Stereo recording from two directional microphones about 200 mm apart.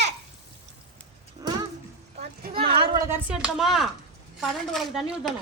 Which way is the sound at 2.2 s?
25° right (ahead or behind).